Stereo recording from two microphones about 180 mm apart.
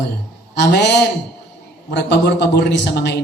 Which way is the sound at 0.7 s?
70° left (ahead or behind).